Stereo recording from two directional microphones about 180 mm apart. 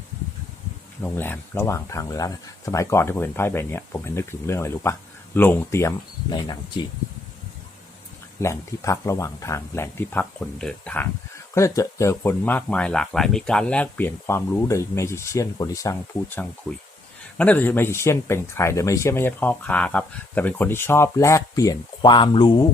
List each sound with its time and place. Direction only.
1.0 s speech: 10° left (ahead or behind)
6.3 s speech: 25° left (ahead or behind)
8.4 s speech: 15° left (ahead or behind)